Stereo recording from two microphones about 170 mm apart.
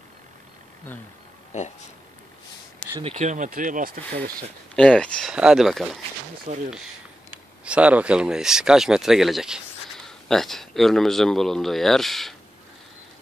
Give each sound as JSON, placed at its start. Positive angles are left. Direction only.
{"t": 3.0, "sound": "speech", "side_deg": -40}
{"t": 4.7, "sound": "speech", "side_deg": 5}
{"t": 6.4, "sound": "speech", "side_deg": -45}
{"t": 7.2, "sound": "speech", "side_deg": -5}